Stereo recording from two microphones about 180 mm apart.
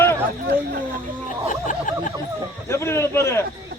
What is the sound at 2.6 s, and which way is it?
Speech, 15° left (ahead or behind).